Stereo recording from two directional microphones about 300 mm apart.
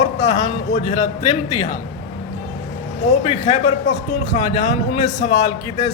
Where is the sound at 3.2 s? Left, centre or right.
Left.